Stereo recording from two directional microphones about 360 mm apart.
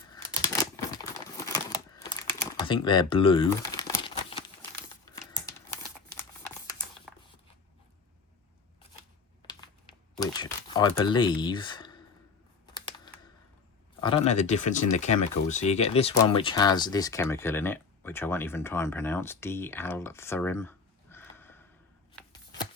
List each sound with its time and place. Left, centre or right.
0.1 s crumpling: centre
1.7 s typing: centre
10.2 s speech: centre
14.0 s speech: centre